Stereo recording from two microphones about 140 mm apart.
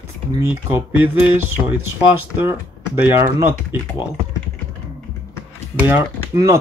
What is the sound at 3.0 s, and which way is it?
Speech, 15° right (ahead or behind).